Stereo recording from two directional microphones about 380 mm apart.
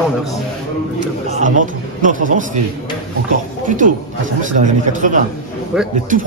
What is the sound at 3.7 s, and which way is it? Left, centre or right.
A man's voice, centre.